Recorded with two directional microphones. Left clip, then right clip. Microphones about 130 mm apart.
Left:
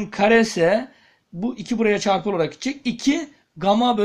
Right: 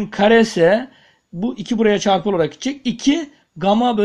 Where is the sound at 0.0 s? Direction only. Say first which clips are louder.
Right 3 dB; 50° right (ahead or behind).